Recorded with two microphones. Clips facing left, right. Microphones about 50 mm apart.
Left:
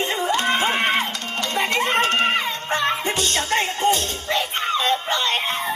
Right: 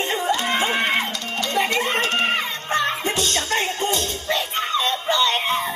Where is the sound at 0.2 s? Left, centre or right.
Left.